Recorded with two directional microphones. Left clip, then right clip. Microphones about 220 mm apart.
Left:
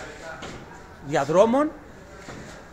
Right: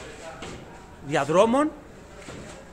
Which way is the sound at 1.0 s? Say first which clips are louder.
Left 1 dB; 5° left (ahead or behind).